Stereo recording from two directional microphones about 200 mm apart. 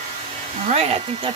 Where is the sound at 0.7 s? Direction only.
30° right (ahead or behind).